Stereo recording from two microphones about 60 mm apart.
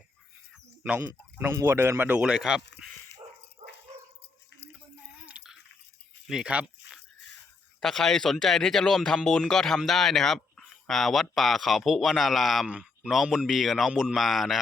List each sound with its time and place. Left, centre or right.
1.6 s speech: right
2.1 s speech: centre
5.3 s a sound: centre
6.4 s speech: right
7.8 s a man's voice: centre
13.5 s a man's voice: centre
13.9 s speech: centre
14.2 s a man's voice: centre